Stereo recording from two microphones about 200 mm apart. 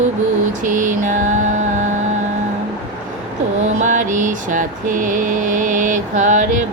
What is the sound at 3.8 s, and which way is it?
Mantra, 40° right (ahead or behind).